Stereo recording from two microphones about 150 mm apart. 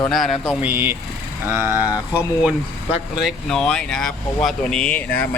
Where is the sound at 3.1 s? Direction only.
Centre (ahead or behind).